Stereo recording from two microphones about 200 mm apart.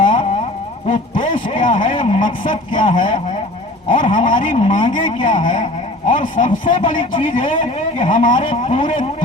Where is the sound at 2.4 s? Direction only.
25° left (ahead or behind).